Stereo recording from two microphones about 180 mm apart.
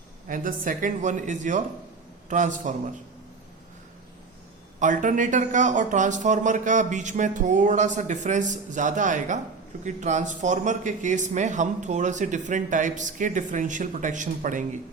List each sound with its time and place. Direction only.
0.3 s speech: 50° right (ahead or behind)
4.8 s speech: 45° right (ahead or behind)